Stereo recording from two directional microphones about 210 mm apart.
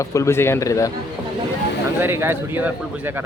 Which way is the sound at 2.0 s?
10° right (ahead or behind).